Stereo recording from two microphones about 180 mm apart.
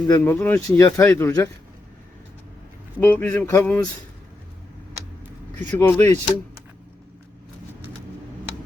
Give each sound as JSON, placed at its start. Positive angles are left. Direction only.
{"t": 0.1, "sound": "speech", "side_deg": 15}
{"t": 3.0, "sound": "speech", "side_deg": 10}
{"t": 5.5, "sound": "speech", "side_deg": 10}